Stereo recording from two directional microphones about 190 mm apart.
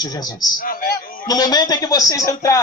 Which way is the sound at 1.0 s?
50° left (ahead or behind).